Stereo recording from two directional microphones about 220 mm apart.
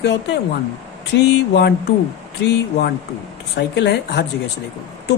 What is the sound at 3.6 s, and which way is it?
Speech, 50° left (ahead or behind).